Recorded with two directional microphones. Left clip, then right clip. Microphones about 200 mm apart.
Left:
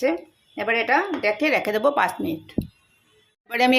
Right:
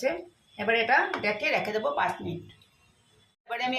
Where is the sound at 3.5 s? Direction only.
55° left (ahead or behind).